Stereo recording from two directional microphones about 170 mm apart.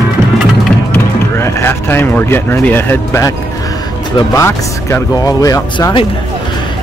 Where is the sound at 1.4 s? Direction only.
15° left (ahead or behind).